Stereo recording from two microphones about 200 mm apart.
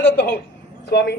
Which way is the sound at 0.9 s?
55° left (ahead or behind).